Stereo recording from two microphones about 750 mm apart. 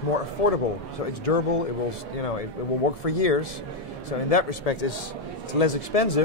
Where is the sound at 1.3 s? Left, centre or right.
Left.